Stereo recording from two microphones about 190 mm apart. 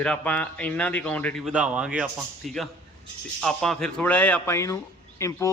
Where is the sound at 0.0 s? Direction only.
5° left (ahead or behind).